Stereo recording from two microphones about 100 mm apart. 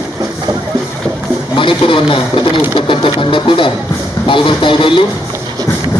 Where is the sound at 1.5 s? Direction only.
60° left (ahead or behind).